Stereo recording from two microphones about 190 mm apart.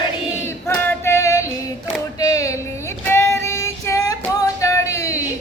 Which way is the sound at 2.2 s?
15° left (ahead or behind).